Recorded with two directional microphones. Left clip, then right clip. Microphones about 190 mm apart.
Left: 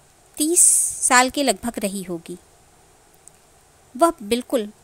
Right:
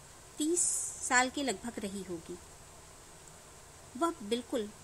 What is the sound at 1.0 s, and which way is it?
A woman's voice, 50° left (ahead or behind).